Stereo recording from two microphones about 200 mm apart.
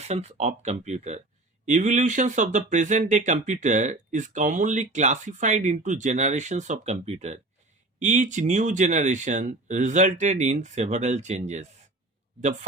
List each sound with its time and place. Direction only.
0.0 s speech: 30° right (ahead or behind)